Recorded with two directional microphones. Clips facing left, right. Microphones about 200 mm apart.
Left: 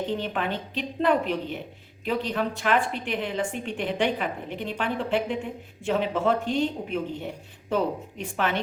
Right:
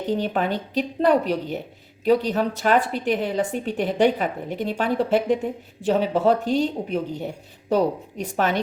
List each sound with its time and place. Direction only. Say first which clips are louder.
0.1 s a woman's voice: right 5 dB; 40° right (ahead or behind)